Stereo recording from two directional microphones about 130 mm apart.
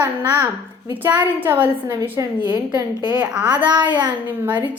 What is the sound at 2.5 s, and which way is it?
Speech, 35° right (ahead or behind).